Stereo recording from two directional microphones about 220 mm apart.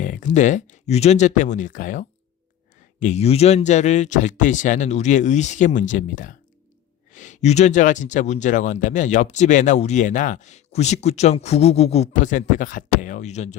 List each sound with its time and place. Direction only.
0.0 s speech: 35° left (ahead or behind)